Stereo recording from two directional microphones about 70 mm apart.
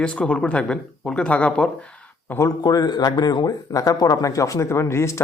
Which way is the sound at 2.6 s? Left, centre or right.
Left.